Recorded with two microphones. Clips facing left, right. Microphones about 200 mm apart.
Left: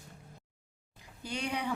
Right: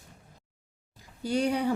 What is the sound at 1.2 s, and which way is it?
Speech, 40° right (ahead or behind).